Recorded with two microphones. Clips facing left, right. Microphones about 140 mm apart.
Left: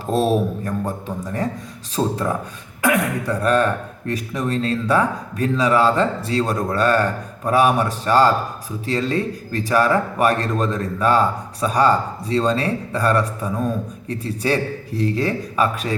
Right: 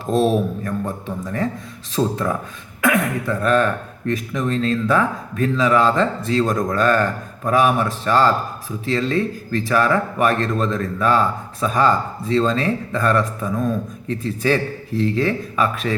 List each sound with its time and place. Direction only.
0.0 s speech: 35° left (ahead or behind)
2.0 s speech: 20° left (ahead or behind)
2.8 s speech: 35° left (ahead or behind)